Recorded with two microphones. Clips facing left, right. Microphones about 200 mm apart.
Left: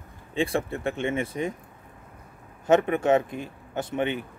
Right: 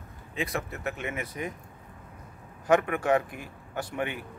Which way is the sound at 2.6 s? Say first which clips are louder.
Left 3 dB; 25° left (ahead or behind).